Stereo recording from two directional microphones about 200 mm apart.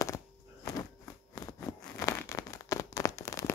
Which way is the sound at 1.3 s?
20° left (ahead or behind).